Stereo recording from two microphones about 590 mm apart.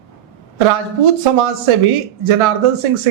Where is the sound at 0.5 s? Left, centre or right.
Right.